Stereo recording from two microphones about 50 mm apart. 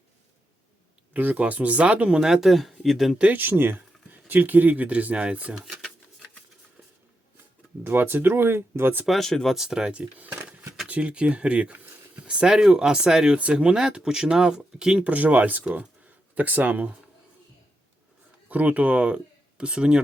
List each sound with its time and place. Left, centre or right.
1.1 s speech: right; by 3.2 s centre
3.3 s speech: right
5.5 s a sound: centre
7.9 s speech: right
9.0 s speech: centre
9.6 s speech: centre
9.9 s speech: right
15.1 s speech: right
18.4 s speech: right